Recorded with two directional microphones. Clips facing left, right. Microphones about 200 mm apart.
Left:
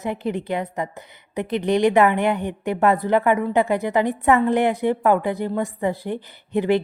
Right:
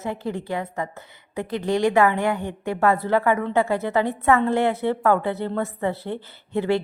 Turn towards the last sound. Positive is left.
turn(degrees=15)  # may be behind; listen again after turning